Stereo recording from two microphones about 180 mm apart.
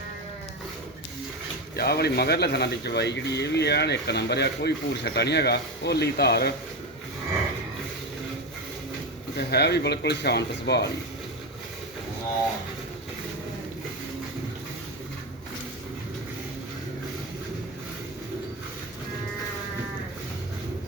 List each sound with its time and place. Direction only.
1.7 s a man's voice: 60° left (ahead or behind)
9.4 s a man's voice: 65° left (ahead or behind)